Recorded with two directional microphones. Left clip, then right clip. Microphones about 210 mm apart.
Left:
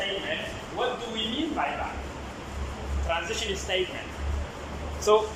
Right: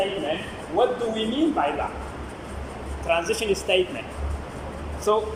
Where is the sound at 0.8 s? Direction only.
15° right (ahead or behind).